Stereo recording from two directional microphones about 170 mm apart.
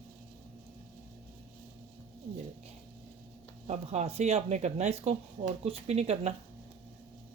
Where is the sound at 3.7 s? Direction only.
40° right (ahead or behind).